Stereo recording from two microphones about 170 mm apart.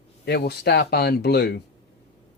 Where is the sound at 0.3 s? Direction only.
70° left (ahead or behind).